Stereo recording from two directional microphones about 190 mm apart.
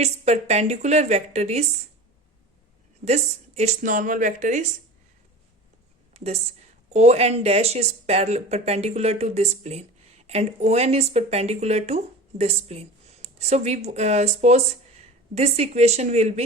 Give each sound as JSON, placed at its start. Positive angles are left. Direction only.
{"t": 0.0, "sound": "speech", "side_deg": -35}
{"t": 3.0, "sound": "speech", "side_deg": -35}
{"t": 6.1, "sound": "a woman's voice", "side_deg": -35}